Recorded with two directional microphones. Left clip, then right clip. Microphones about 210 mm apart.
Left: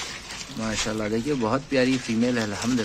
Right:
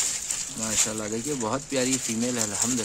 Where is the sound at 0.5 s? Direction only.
Centre (ahead or behind).